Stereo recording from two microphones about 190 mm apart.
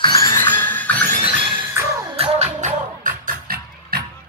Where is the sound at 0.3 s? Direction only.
10° left (ahead or behind).